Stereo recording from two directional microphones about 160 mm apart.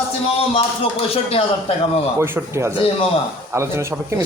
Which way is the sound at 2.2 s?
15° right (ahead or behind).